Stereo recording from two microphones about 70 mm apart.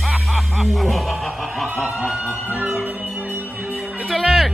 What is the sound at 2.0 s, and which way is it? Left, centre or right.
Speech, centre.